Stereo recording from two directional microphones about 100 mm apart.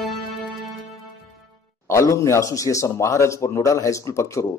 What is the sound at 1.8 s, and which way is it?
A man's voice, 30° left (ahead or behind).